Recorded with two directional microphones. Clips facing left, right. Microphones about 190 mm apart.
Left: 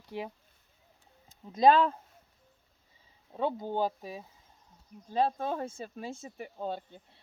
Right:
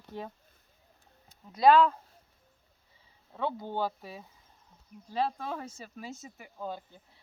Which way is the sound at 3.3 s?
15° left (ahead or behind).